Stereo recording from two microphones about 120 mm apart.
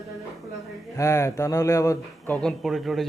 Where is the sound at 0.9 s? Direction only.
25° left (ahead or behind).